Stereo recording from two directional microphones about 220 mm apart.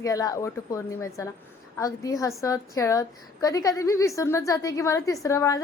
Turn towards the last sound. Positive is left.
turn(degrees=15)  # may be behind; listen again after turning